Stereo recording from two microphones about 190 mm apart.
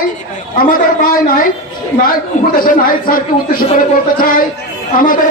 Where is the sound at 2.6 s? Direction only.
50° left (ahead or behind).